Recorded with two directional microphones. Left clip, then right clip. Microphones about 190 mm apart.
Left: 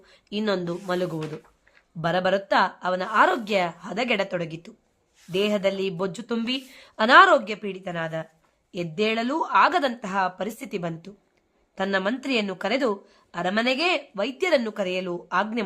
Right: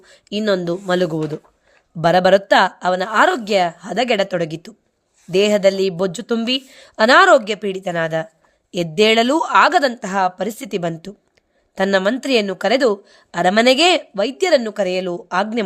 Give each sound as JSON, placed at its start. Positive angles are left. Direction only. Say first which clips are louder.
{"t": 0.0, "sound": "speech", "louder": "right 7 dB", "side_deg": -35}